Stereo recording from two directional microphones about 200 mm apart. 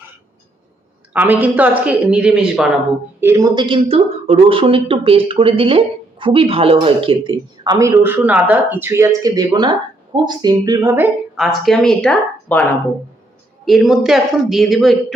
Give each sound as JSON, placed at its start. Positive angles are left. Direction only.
{"t": 1.1, "sound": "speech", "side_deg": -10}
{"t": 3.2, "sound": "speech", "side_deg": -15}
{"t": 13.7, "sound": "speech", "side_deg": 0}